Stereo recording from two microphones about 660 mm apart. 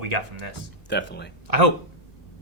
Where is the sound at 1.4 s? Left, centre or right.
Right.